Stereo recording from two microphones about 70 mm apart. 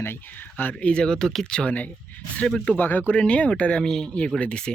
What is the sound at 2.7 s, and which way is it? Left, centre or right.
Speech, left.